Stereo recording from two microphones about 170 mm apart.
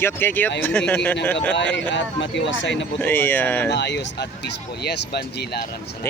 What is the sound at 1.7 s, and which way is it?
Speech, 90° left.